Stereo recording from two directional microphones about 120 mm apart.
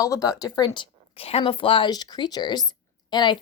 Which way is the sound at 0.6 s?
40° left (ahead or behind).